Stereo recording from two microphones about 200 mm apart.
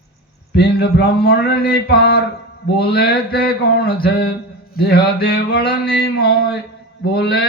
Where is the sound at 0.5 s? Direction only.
55° left (ahead or behind).